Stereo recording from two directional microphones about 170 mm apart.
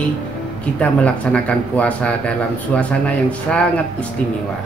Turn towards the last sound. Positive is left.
turn(degrees=5)  # may be behind; listen again after turning